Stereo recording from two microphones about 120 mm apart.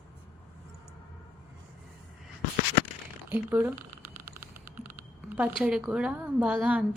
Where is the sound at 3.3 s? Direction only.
15° right (ahead or behind).